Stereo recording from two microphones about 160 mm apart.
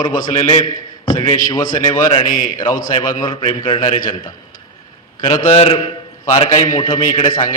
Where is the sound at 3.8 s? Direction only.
60° left (ahead or behind).